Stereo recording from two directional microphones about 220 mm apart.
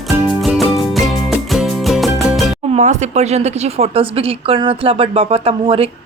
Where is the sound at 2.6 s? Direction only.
30° right (ahead or behind).